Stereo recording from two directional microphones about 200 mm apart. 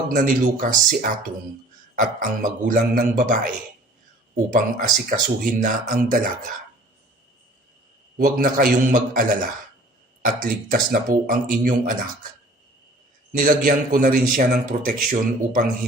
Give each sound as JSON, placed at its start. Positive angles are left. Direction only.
{"t": 0.1, "sound": "speech", "side_deg": -40}
{"t": 4.5, "sound": "speech", "side_deg": -40}
{"t": 8.2, "sound": "speech", "side_deg": -40}
{"t": 13.3, "sound": "speech", "side_deg": -45}